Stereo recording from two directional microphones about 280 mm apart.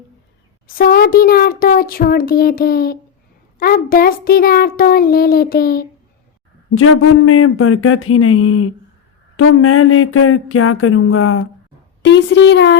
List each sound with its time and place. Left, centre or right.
0.7 s a child's voice: left
6.7 s a child's voice: left